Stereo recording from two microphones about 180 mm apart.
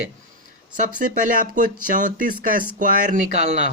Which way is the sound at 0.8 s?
50° right (ahead or behind).